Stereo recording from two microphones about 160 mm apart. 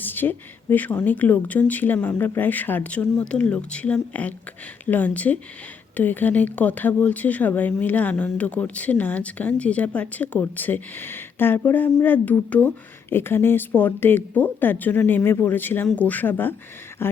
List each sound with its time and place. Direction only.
0.0 s speech: 10° left (ahead or behind)